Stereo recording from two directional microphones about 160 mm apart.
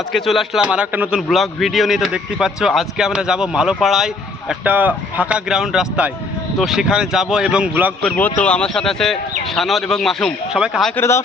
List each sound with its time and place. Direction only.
0.1 s a man's voice: centre (ahead or behind)
8.0 s a man's voice: 10° left (ahead or behind)
10.9 s speech: 15° left (ahead or behind)